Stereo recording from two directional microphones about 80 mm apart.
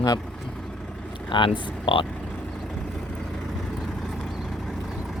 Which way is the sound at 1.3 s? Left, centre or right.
Left.